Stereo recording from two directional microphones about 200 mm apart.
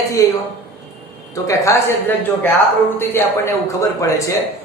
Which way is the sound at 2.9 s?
15° left (ahead or behind).